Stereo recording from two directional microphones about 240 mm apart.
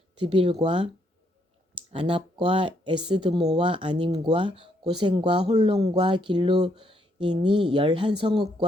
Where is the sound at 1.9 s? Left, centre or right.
Right.